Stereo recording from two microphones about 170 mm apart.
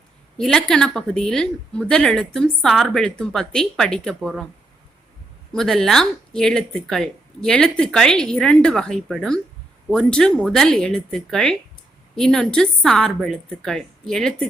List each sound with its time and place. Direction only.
0.3 s a woman's voice: 5° left (ahead or behind)
5.5 s a woman's voice: centre (ahead or behind)